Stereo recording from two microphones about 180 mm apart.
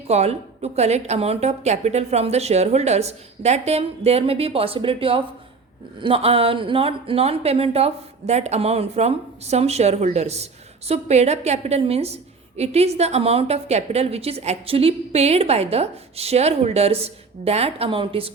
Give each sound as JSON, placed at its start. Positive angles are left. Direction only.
{"t": 0.1, "sound": "speech", "side_deg": -35}